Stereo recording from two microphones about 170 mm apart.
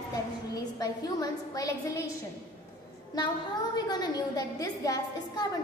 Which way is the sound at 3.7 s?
25° left (ahead or behind).